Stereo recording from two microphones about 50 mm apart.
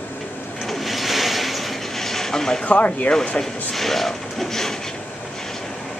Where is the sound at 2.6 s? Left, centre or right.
Left.